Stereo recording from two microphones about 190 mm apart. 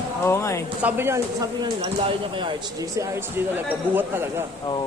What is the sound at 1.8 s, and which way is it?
Speech, 25° right (ahead or behind).